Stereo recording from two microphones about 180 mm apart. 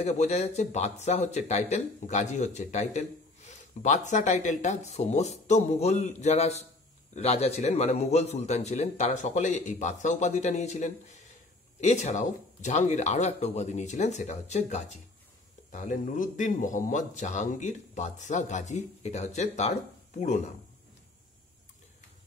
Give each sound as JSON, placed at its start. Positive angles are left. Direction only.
{"t": 0.0, "sound": "speech", "side_deg": 35}